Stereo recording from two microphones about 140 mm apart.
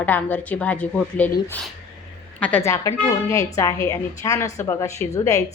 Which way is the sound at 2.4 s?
15° left (ahead or behind).